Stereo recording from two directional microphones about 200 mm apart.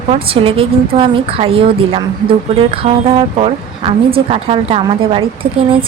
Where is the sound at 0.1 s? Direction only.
30° right (ahead or behind).